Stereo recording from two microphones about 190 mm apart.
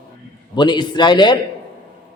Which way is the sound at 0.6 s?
25° left (ahead or behind).